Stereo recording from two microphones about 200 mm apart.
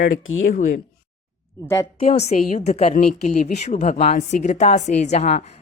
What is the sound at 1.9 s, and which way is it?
A woman's voice, 35° left (ahead or behind).